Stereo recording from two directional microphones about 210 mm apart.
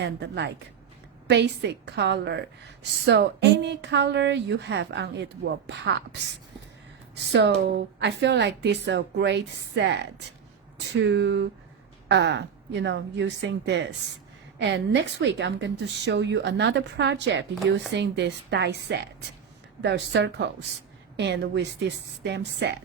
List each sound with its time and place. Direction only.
0.0 s a woman's voice: 55° right (ahead or behind)
7.3 s a woman's voice: 55° right (ahead or behind)